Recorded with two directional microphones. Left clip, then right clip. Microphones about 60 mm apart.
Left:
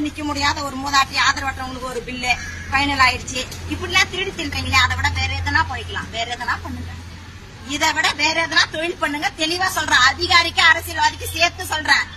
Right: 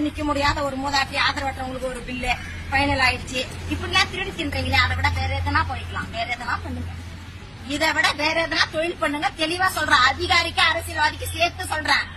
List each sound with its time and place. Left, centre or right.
0.2 s a woman's voice: centre
8.0 s a woman's voice: centre